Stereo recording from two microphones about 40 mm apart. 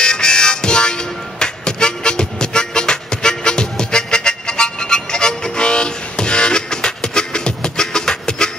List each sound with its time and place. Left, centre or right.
0.0 s music: centre